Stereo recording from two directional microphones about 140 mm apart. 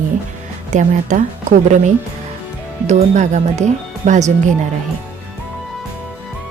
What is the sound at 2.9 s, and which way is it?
Speech, 60° right (ahead or behind).